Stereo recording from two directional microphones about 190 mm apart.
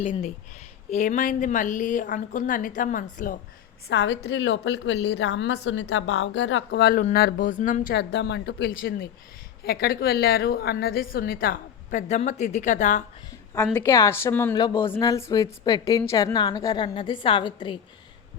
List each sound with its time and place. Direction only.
0.9 s a woman's voice: 40° left (ahead or behind)
3.8 s a woman's voice: 65° left (ahead or behind); by 7.9 s 40° left (ahead or behind)
7.9 s a woman's voice: 60° left (ahead or behind); by 13.1 s 40° left (ahead or behind)
13.7 s a woman's voice: 15° left (ahead or behind)